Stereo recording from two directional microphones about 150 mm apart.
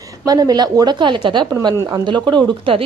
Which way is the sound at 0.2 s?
25° right (ahead or behind).